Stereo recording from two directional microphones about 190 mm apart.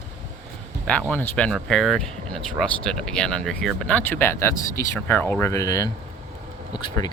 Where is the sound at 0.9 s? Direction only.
5° left (ahead or behind).